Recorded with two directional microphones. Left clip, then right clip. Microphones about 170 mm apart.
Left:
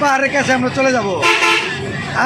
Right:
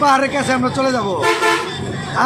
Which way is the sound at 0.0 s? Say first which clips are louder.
Even; centre (ahead or behind).